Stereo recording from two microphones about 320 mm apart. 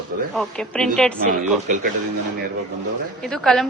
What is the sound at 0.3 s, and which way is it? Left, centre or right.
A woman's voice, centre.